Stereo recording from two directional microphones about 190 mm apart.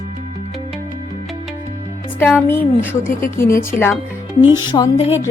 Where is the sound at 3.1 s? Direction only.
45° left (ahead or behind).